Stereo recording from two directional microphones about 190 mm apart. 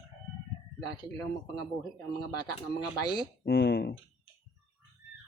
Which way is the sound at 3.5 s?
55° left (ahead or behind).